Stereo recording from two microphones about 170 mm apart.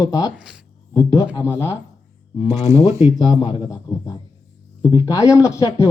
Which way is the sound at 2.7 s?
20° right (ahead or behind).